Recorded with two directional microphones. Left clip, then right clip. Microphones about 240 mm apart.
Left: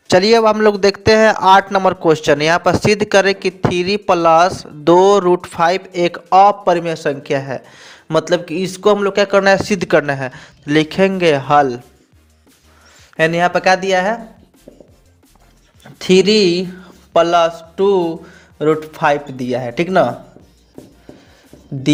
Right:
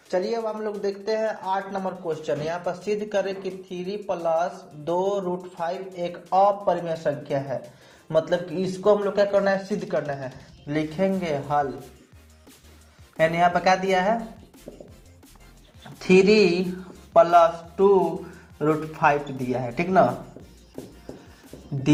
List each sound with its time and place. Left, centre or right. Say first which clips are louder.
0.1 s a man's voice: left 15 dB; left
13.1 s a man's voice: left 6 dB; left
16.0 s a man's voice: left 5 dB; left
17.1 s mantra: left 4 dB; left
18.6 s a man's voice: left 7 dB; left